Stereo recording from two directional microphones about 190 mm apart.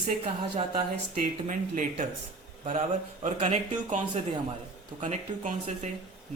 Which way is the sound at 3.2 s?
35° right (ahead or behind).